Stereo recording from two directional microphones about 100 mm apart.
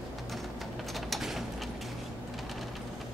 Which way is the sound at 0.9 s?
Centre (ahead or behind).